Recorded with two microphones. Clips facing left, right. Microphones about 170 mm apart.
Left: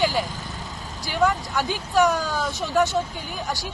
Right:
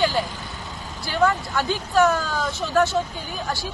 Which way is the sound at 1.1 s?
15° left (ahead or behind).